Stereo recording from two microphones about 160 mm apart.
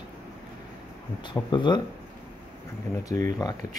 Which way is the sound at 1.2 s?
30° left (ahead or behind).